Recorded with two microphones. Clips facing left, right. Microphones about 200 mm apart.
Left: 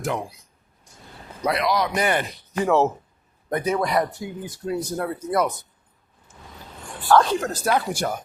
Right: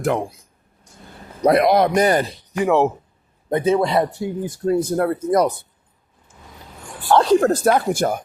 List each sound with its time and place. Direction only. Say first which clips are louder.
0.0 s speech: right 6 dB; 55° right (ahead or behind)
1.4 s a man's voice: right 8 dB; 50° right (ahead or behind)
2.6 s speech: right 3 dB; 15° right (ahead or behind)
3.5 s speech: right 5 dB; 25° right (ahead or behind)
4.4 s a man's voice: right 8 dB; 50° right (ahead or behind)
5.3 s speech: right 4 dB; 35° right (ahead or behind)
7.3 s a man's voice: right 8 dB; 55° right (ahead or behind)